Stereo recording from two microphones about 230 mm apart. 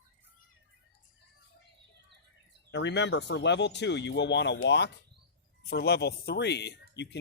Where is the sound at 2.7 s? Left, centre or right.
Left.